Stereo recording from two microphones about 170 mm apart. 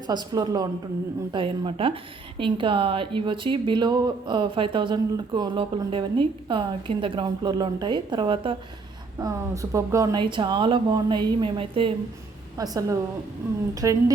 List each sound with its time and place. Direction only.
0.1 s a woman's voice: 25° right (ahead or behind)
9.1 s a woman's voice: 20° right (ahead or behind)
12.5 s a woman's voice: 20° right (ahead or behind)